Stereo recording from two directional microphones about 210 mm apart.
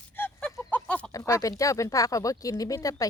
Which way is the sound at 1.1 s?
15° left (ahead or behind).